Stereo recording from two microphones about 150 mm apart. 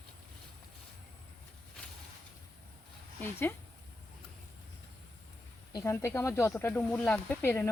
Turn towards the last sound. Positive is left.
turn(degrees=15)  # may be behind; listen again after turning